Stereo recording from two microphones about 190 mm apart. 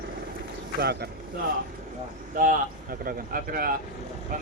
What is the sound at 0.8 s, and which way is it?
Speech, 55° right (ahead or behind).